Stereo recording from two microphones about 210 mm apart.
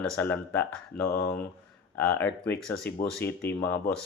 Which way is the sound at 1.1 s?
45° left (ahead or behind).